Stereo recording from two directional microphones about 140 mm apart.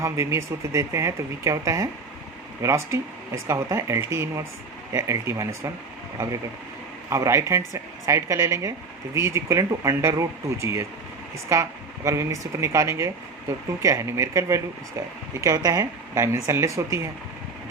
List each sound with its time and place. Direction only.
0.0 s speech: 20° right (ahead or behind)
7.1 s speech: 20° right (ahead or behind)